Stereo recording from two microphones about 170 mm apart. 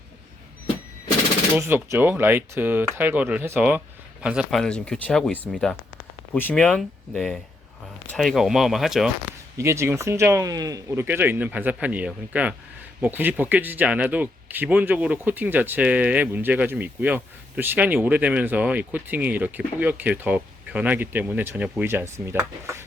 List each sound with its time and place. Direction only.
1.5 s speech: 15° right (ahead or behind)
4.6 s speech: 5° left (ahead or behind)
9.6 s speech: 15° right (ahead or behind)